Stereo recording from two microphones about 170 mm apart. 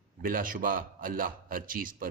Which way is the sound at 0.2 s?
55° right (ahead or behind).